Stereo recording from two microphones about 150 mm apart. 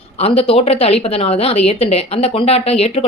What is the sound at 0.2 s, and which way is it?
A woman's voice, 40° left (ahead or behind).